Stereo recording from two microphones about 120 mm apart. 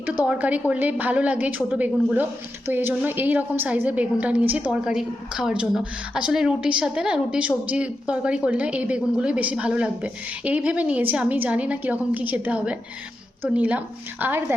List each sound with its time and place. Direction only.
0.0 s a woman's voice: 10° right (ahead or behind)